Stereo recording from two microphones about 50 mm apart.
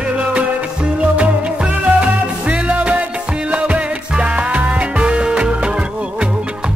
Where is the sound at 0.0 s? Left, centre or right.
Right.